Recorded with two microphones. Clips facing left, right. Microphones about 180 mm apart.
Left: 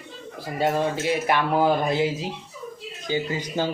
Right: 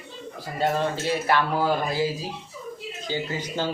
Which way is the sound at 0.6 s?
15° left (ahead or behind).